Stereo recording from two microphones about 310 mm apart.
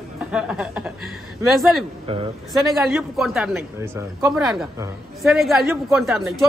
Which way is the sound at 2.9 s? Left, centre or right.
Centre.